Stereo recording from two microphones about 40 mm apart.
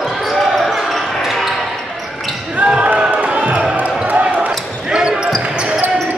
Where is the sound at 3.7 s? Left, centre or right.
Right.